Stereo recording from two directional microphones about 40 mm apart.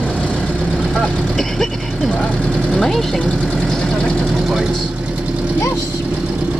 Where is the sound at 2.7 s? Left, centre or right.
Centre.